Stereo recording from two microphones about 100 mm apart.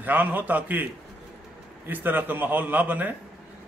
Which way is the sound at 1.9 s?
20° right (ahead or behind).